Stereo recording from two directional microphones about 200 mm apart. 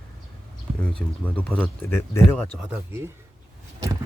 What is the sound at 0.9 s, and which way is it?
Speech, 5° left (ahead or behind).